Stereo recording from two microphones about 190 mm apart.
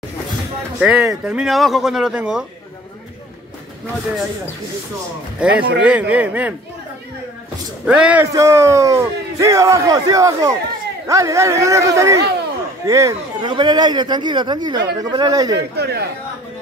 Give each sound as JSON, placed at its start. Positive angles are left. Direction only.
{"t": 0.7, "sound": "speech", "side_deg": -5}
{"t": 5.4, "sound": "a man's voice", "side_deg": -5}
{"t": 7.8, "sound": "a man's voice", "side_deg": -5}
{"t": 15.7, "sound": "speech", "side_deg": -60}